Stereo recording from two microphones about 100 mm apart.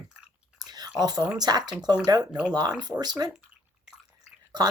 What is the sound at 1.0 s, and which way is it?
Speech, 40° right (ahead or behind).